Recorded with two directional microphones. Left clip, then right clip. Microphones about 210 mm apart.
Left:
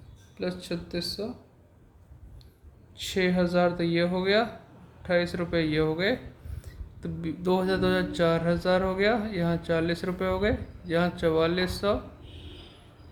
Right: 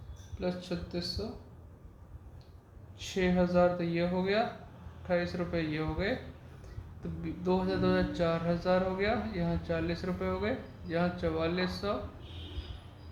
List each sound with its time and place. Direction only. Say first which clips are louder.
0.3 s mantra: left 3 dB; 50° left (ahead or behind)
3.0 s mantra: left 4 dB; 55° left (ahead or behind)
7.2 s mantra: left 5 dB; 55° left (ahead or behind)